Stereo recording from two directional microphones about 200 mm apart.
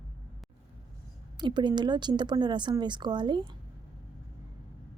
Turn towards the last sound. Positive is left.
turn(degrees=-25)  # may be behind; listen again after turning